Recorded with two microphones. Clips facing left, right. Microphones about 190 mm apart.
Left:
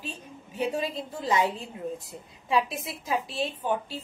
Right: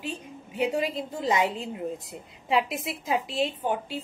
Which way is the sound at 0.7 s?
15° right (ahead or behind).